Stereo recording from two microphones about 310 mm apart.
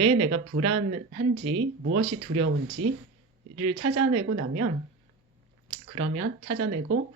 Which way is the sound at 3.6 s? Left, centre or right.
Centre.